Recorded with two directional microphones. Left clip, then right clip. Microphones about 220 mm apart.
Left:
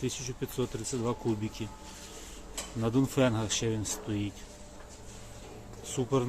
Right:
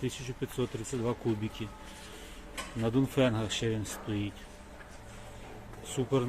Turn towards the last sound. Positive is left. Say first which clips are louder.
# left 1 dB
turn(degrees=0)  # may be behind; listen again after turning